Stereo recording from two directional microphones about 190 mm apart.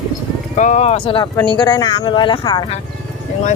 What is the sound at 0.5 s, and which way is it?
Speech, 40° left (ahead or behind).